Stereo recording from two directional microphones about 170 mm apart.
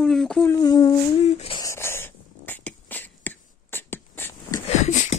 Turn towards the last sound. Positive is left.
turn(degrees=45)  # may be behind; listen again after turning